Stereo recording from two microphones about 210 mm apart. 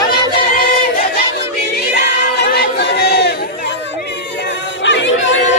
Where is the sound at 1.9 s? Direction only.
50° left (ahead or behind).